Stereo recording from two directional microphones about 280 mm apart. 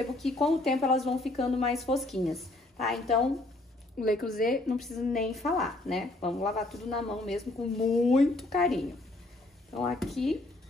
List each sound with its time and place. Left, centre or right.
0.2 s a woman's voice: centre
4.3 s a woman's voice: left
4.7 s a woman's voice: centre